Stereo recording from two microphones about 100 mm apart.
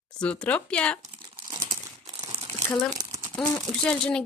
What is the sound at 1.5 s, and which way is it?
Crumpling, 45° right (ahead or behind).